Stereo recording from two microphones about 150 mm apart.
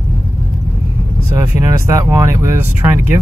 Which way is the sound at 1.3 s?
20° right (ahead or behind).